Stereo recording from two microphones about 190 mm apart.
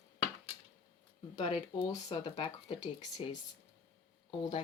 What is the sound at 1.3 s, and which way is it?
Speech, 25° left (ahead or behind).